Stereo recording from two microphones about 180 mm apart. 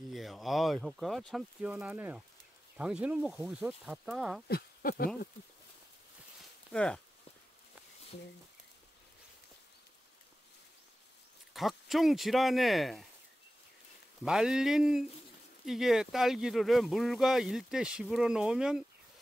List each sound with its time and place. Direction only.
0.1 s speech: centre (ahead or behind)
4.5 s speech: 55° left (ahead or behind)
6.7 s speech: 5° left (ahead or behind)
11.5 s speech: centre (ahead or behind)
14.2 s speech: 5° right (ahead or behind)